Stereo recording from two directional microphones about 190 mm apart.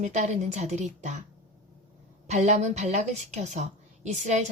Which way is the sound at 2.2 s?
40° right (ahead or behind).